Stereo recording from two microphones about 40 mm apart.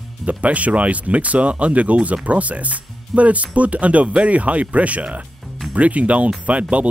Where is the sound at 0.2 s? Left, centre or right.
Right.